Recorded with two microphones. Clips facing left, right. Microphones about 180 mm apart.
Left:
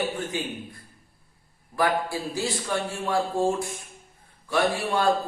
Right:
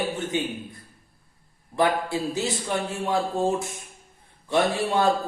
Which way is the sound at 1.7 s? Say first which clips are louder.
Right 2 dB; 20° right (ahead or behind).